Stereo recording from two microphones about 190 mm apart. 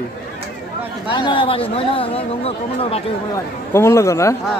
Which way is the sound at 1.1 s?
25° left (ahead or behind).